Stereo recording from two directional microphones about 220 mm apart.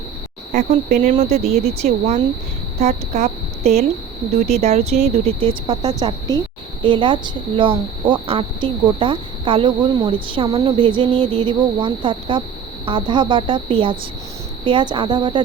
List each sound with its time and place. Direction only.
0.5 s a woman's voice: 35° right (ahead or behind)